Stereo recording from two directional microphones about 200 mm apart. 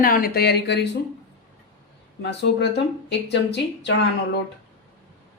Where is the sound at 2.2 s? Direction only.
60° left (ahead or behind).